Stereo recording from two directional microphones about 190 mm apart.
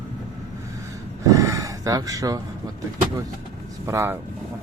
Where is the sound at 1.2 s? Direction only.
15° right (ahead or behind).